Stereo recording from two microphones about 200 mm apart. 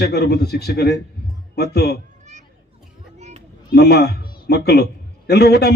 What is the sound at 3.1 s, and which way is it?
Children playing, 35° right (ahead or behind).